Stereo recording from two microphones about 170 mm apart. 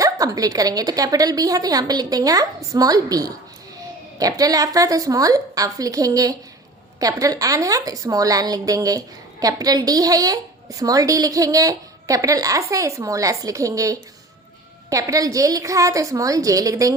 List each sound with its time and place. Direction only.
0.0 s a woman's voice: 20° right (ahead or behind)